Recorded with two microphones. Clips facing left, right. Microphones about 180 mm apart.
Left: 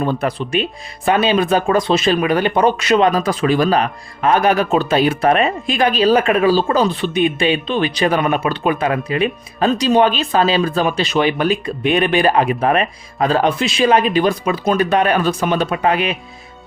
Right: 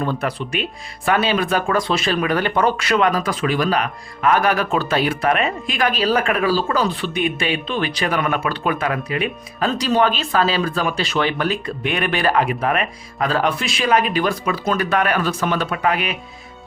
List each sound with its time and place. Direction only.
0.0 s speech: 20° left (ahead or behind)